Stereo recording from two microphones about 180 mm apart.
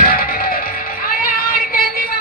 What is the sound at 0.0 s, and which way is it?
Music, 55° left (ahead or behind).